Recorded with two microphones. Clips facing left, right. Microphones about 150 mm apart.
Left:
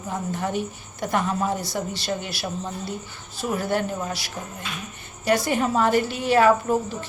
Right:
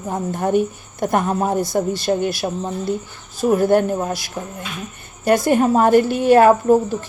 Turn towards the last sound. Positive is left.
turn(degrees=-45)  # may be behind; listen again after turning